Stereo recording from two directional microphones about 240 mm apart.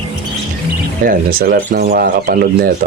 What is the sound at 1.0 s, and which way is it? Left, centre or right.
Speech, right.